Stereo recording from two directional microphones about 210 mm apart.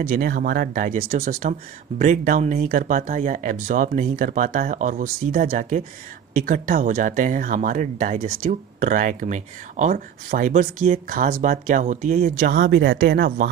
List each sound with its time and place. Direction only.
0.0 s speech: 45° right (ahead or behind)